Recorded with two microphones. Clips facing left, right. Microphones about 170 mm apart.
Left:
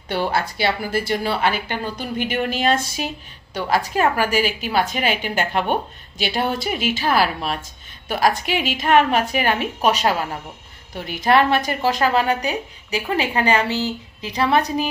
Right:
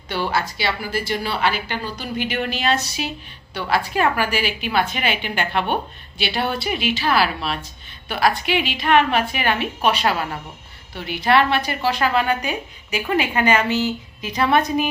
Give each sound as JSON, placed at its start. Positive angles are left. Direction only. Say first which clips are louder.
{"t": 0.3, "sound": "a woman's voice", "louder": "left 2 dB", "side_deg": 55}
{"t": 11.0, "sound": "a woman's voice", "louder": "left 1 dB", "side_deg": 45}